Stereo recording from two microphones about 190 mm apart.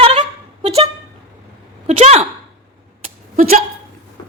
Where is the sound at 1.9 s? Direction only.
35° right (ahead or behind).